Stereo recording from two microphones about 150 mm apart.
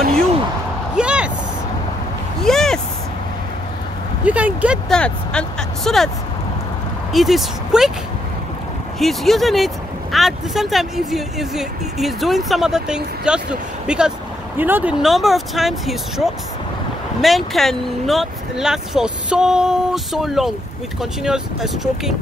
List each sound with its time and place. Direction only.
0.9 s vehicle: 5° right (ahead or behind)
2.4 s a sound: 5° left (ahead or behind)
4.2 s a sound: 10° right (ahead or behind)
4.8 s speech: 5° left (ahead or behind)
7.1 s speech: centre (ahead or behind)
9.0 s speech: centre (ahead or behind)
17.2 s speech: centre (ahead or behind)